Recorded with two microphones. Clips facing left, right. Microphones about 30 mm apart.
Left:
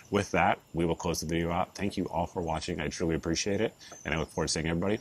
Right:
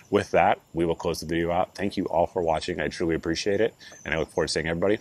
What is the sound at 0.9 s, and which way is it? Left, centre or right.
Speech, right.